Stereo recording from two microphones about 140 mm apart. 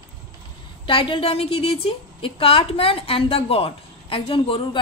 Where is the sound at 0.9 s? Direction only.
40° left (ahead or behind).